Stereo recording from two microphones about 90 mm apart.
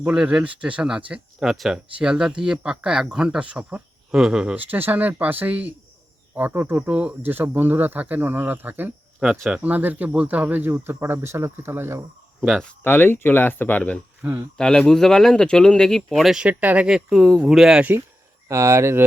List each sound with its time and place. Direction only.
0.1 s speech: 10° right (ahead or behind); by 12.0 s 30° right (ahead or behind)
12.4 s speech: centre (ahead or behind)
12.6 s speech: 20° left (ahead or behind)
14.6 s speech: 5° left (ahead or behind)
16.5 s speech: 15° right (ahead or behind)
18.4 s speech: 35° right (ahead or behind)